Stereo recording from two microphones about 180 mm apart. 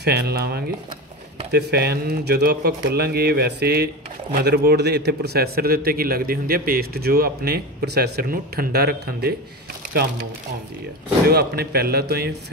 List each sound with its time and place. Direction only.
0.0 s speech: 65° right (ahead or behind)
11.2 s speech: 60° right (ahead or behind)